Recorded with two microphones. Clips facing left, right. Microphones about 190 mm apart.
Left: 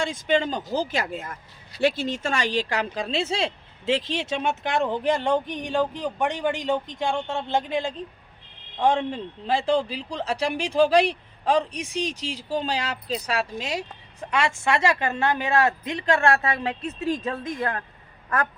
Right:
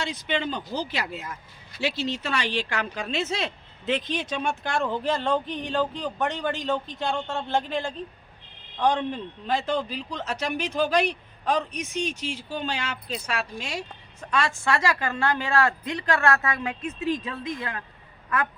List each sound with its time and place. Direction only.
0.0 s speech: 50° left (ahead or behind)
14.3 s speech: 25° left (ahead or behind); by 18.5 s 45° left (ahead or behind)